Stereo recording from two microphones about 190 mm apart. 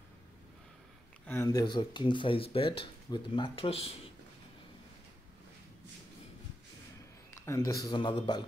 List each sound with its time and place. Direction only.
1.2 s speech: 15° left (ahead or behind); by 3.9 s 30° left (ahead or behind)
7.4 s speech: 15° left (ahead or behind)